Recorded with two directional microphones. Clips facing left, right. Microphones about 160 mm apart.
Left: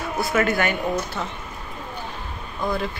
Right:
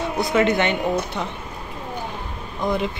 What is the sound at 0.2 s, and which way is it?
Speech, 20° right (ahead or behind).